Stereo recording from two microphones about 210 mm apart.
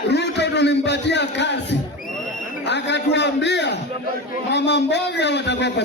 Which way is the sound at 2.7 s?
55° left (ahead or behind).